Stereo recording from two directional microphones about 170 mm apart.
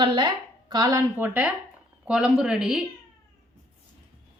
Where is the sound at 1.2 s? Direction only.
10° right (ahead or behind).